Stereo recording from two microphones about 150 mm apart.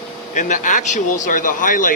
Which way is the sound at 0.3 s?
55° left (ahead or behind).